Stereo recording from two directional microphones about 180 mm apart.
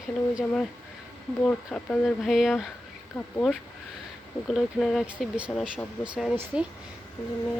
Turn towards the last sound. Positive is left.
turn(degrees=-5)  # may be behind; listen again after turning